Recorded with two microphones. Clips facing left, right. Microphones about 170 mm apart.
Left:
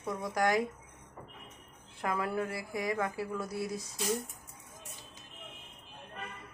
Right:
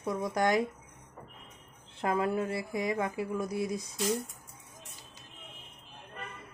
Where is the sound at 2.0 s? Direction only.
25° right (ahead or behind).